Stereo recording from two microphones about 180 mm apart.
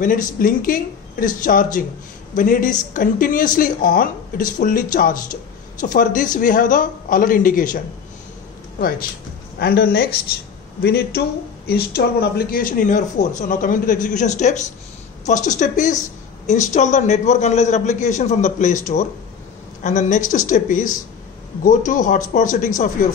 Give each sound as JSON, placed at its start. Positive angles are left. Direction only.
{"t": 0.0, "sound": "speech", "side_deg": 50}
{"t": 9.6, "sound": "a woman's voice", "side_deg": 60}